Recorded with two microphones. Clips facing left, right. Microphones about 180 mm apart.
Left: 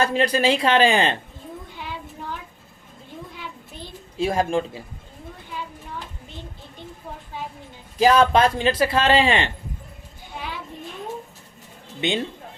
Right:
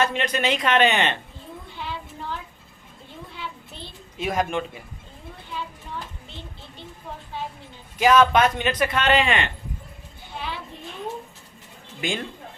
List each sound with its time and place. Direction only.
0.0 s speech: 35° left (ahead or behind)
4.2 s speech: 30° left (ahead or behind)
7.9 s speech: 30° left (ahead or behind)
11.9 s speech: 25° left (ahead or behind)